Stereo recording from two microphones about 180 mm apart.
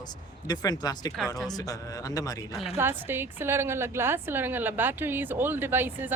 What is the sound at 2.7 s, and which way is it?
A woman's voice, 10° right (ahead or behind).